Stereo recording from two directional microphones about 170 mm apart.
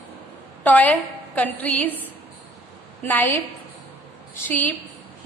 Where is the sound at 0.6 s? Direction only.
10° left (ahead or behind).